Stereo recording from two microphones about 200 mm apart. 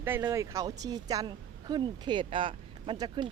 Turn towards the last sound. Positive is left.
turn(degrees=-20)  # may be behind; listen again after turning